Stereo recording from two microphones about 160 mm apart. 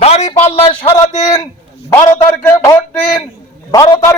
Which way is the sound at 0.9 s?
20° left (ahead or behind).